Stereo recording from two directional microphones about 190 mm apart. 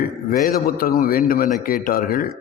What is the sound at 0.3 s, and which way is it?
A man's voice, 50° left (ahead or behind).